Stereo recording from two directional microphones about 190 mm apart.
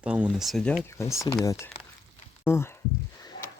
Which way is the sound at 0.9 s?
15° left (ahead or behind).